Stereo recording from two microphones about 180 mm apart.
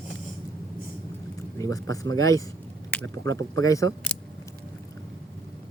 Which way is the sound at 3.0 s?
90° right.